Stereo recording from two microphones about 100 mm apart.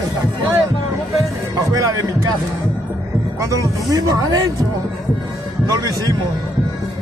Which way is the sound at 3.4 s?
30° right (ahead or behind).